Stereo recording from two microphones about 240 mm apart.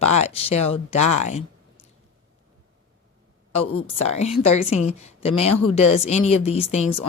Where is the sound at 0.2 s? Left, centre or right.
Left.